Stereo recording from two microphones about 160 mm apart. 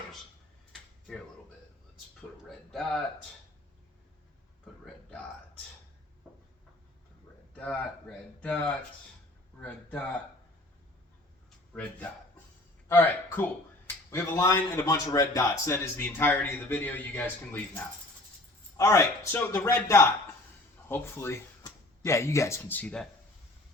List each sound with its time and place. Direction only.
0.7 s a sound: 5° left (ahead or behind)
2.5 s speech: centre (ahead or behind)
7.5 s speech: 5° left (ahead or behind)
11.7 s speech: 10° left (ahead or behind)
18.8 s a man's voice: 20° left (ahead or behind)